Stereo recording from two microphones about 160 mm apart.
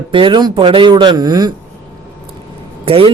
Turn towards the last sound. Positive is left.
turn(degrees=-35)  # may be behind; listen again after turning